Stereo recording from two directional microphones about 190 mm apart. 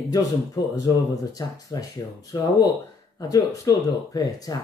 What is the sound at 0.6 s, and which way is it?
Speech, 20° left (ahead or behind).